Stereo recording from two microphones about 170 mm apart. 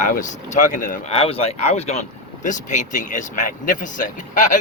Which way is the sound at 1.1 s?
35° left (ahead or behind).